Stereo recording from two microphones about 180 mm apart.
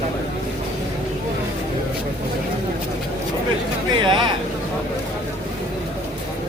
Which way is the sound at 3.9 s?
25° right (ahead or behind).